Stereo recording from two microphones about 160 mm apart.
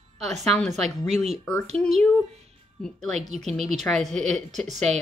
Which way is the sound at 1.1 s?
45° right (ahead or behind).